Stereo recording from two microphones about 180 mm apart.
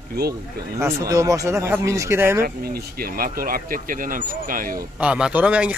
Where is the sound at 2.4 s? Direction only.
55° right (ahead or behind).